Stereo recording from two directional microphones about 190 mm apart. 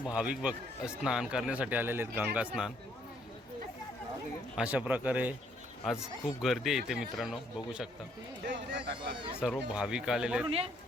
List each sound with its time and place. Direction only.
0.1 s a man's voice: 5° right (ahead or behind)
4.5 s a man's voice: 5° right (ahead or behind)
9.0 s speech: 25° right (ahead or behind)
9.3 s speech: 5° right (ahead or behind)
10.4 s speech: 30° right (ahead or behind)